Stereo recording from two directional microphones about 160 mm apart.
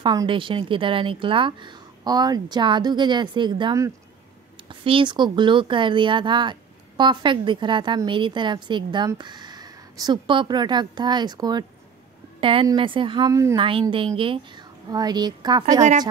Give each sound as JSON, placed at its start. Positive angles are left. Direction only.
{"t": 0.0, "sound": "a woman's voice", "side_deg": -25}
{"t": 13.3, "sound": "speech", "side_deg": -20}
{"t": 13.6, "sound": "a woman's voice", "side_deg": -35}